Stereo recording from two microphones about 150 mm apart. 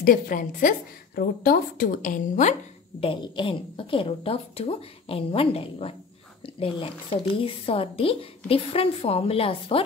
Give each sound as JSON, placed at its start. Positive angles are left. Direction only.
{"t": 0.0, "sound": "a woman's voice", "side_deg": 70}
{"t": 3.0, "sound": "a woman's voice", "side_deg": 35}